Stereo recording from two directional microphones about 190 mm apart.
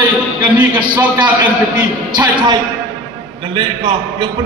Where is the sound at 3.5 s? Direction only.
25° right (ahead or behind).